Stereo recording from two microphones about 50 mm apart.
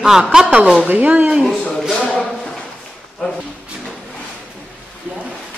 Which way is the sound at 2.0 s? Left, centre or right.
Centre.